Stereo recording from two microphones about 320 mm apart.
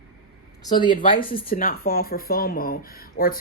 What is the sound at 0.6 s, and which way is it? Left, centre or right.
A woman's voice, centre.